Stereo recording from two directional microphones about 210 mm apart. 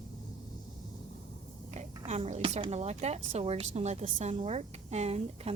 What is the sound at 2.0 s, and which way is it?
A woman's voice, 30° right (ahead or behind).